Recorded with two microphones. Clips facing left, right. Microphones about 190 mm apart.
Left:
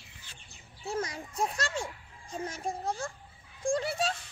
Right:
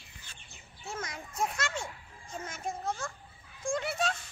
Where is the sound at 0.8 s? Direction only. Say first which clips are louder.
Left 6 dB; 35° left (ahead or behind).